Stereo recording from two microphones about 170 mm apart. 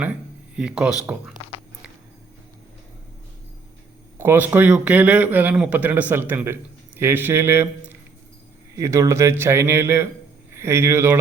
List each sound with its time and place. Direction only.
0.0 s speech: 5° right (ahead or behind)
4.2 s speech: 10° right (ahead or behind)